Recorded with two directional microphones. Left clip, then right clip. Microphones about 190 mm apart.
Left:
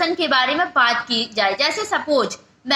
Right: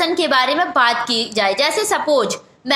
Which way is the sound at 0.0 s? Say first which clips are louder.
Right 2 dB; 40° right (ahead or behind).